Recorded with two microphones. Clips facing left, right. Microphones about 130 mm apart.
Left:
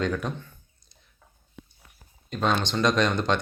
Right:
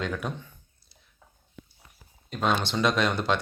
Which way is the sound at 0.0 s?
5° right (ahead or behind).